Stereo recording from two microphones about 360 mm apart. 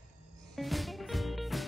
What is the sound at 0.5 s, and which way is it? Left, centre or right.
Music, centre.